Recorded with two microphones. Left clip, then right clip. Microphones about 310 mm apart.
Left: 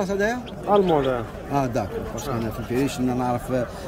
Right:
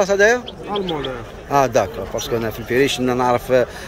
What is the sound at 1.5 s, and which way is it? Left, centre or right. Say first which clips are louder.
Speech: right 9 dB; centre.